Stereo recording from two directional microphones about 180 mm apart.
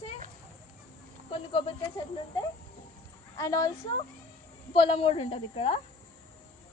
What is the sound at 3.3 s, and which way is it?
A woman's voice, 20° left (ahead or behind).